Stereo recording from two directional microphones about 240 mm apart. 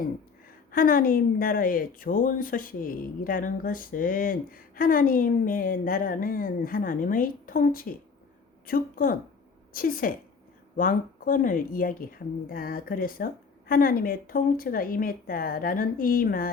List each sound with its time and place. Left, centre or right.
0.7 s a woman's voice: left